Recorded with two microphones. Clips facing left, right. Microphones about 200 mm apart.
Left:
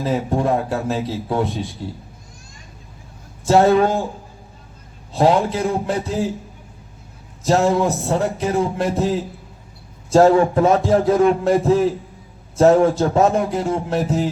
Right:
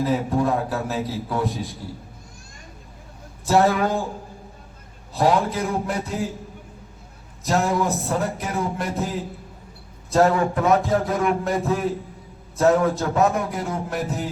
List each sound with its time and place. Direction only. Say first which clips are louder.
0.0 s a man's voice: left 1 dB; 25° left (ahead or behind)
3.4 s a man's voice: left 5 dB; 25° left (ahead or behind)
5.1 s a man's voice: left 4 dB; 25° left (ahead or behind)
7.4 s a man's voice: left 5 dB; 30° left (ahead or behind)